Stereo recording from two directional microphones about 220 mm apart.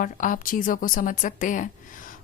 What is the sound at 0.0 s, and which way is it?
A woman's voice, 35° left (ahead or behind).